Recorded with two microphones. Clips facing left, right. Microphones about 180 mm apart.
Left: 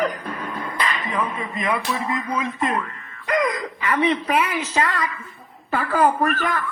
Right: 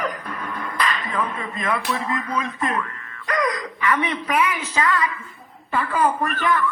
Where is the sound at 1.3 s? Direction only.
10° left (ahead or behind); by 4.8 s 30° left (ahead or behind).